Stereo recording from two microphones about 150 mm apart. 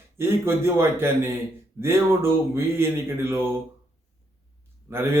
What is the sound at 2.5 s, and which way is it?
Speech, 15° right (ahead or behind).